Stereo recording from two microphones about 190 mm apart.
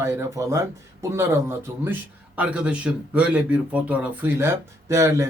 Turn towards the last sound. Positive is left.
turn(degrees=-15)  # may be behind; listen again after turning